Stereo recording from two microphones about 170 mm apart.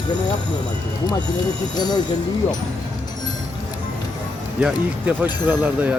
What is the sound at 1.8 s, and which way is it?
Speech, 25° left (ahead or behind).